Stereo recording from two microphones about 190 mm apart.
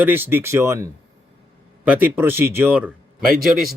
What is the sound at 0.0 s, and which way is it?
A man's voice, 10° right (ahead or behind).